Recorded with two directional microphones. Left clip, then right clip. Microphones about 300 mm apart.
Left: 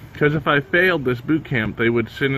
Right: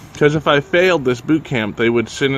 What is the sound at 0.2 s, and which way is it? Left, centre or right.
Speech, centre.